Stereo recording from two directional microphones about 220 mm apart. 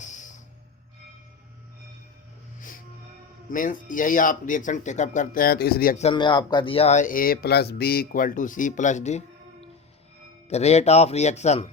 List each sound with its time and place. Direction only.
0.0 s music: 35° left (ahead or behind)
3.5 s speech: 35° left (ahead or behind)
6.1 s speech: 20° left (ahead or behind)